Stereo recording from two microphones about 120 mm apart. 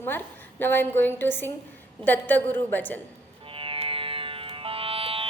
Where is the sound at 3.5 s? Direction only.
50° right (ahead or behind).